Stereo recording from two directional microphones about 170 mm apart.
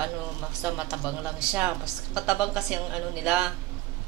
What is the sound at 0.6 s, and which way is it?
A woman's voice, 10° right (ahead or behind).